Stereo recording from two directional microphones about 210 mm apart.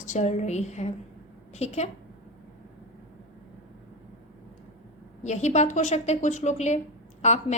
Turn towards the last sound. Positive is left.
turn(degrees=30)  # may be behind; listen again after turning